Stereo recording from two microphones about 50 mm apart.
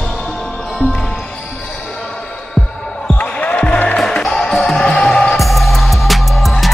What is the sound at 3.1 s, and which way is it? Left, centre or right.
Basketball bounce, left.